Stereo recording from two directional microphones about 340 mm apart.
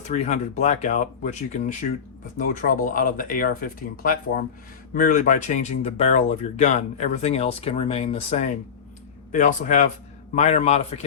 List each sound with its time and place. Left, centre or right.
0.1 s speech: centre
2.4 s speech: left